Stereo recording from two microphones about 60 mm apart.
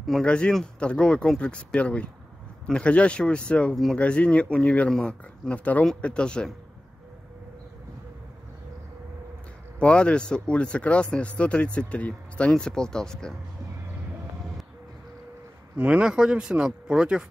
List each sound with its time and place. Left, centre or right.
0.2 s speech: centre
3.7 s speech: centre
4.0 s speech: left
4.9 s speech: centre
5.5 s speech: left
9.8 s speech: centre
15.8 s speech: centre